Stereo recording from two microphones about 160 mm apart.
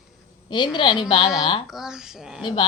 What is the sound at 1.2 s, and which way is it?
A child's voice, 5° right (ahead or behind).